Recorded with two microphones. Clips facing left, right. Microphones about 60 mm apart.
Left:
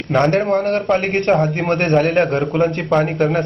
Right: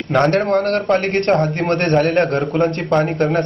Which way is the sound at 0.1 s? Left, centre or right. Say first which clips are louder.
Even; centre.